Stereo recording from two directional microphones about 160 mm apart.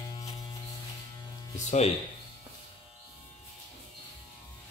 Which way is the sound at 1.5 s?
45° left (ahead or behind).